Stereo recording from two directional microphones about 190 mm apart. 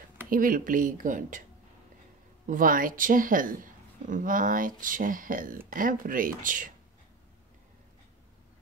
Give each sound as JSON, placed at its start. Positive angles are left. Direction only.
{"t": 0.3, "sound": "speech", "side_deg": -45}
{"t": 2.4, "sound": "speech", "side_deg": -45}